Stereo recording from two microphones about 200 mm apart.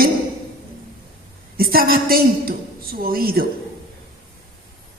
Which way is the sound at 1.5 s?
45° right (ahead or behind).